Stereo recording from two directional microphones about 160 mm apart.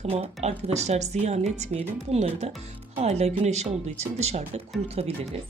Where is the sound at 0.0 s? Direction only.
40° right (ahead or behind).